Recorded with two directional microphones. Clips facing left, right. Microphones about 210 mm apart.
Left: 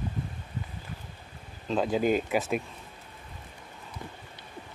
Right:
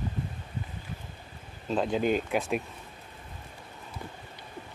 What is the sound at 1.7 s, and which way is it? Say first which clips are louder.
Speech: left 1 dB; centre (ahead or behind).